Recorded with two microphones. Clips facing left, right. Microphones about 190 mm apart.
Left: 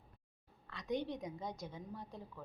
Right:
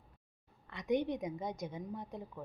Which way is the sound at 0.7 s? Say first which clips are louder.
Right 6 dB; 20° right (ahead or behind).